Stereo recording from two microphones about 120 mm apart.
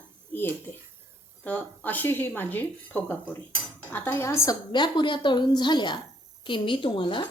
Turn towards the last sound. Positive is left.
turn(degrees=45)  # may be behind; listen again after turning